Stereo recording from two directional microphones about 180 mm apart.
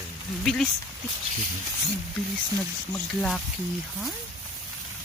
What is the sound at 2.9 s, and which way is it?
Speech, 5° left (ahead or behind).